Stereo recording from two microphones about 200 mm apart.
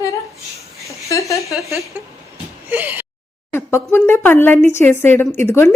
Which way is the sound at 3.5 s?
15° left (ahead or behind).